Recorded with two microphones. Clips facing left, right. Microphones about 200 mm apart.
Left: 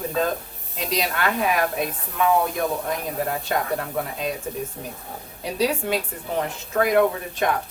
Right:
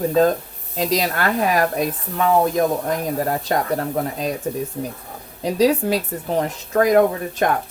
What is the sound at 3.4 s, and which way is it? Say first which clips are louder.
Speech: right 4 dB; 35° right (ahead or behind).